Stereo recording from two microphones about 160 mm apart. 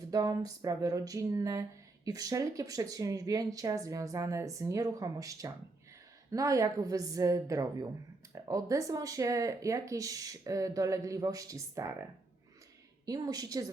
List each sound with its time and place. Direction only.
0.1 s speech: 20° right (ahead or behind)
13.1 s speech: 25° right (ahead or behind)